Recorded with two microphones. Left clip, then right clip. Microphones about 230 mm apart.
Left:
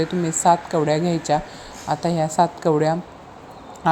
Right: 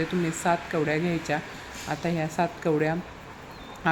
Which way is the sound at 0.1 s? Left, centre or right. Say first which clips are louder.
Left 8 dB; centre.